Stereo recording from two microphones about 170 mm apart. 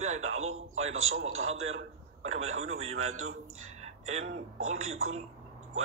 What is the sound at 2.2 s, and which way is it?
A man's voice, 40° right (ahead or behind).